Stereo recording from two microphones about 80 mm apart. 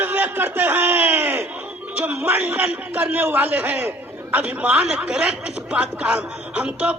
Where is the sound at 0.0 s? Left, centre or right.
Right.